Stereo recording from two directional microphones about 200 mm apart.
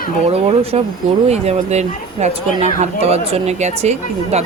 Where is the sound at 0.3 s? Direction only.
30° right (ahead or behind).